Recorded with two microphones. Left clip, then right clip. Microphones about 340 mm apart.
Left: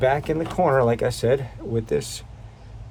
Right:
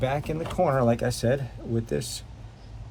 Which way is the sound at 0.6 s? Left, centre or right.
Left.